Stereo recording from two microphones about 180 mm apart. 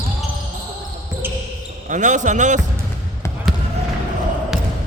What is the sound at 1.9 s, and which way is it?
Speech, 45° right (ahead or behind).